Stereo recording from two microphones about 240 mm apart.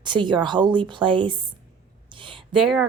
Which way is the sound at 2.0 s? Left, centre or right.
Right.